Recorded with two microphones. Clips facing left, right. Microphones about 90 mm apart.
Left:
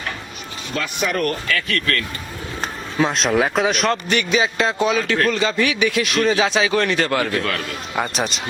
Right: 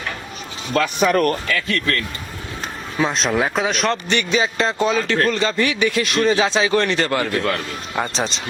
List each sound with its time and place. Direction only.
0.7 s speech: 40° right (ahead or behind)
1.6 s speech: 30° right (ahead or behind)
3.1 s speech: centre (ahead or behind)
7.3 s speech: 20° right (ahead or behind)
7.9 s speech: 10° left (ahead or behind)